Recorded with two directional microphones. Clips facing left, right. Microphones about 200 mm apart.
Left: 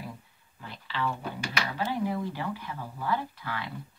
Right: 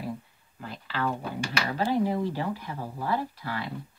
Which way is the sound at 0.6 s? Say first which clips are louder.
Right 2 dB; 45° right (ahead or behind).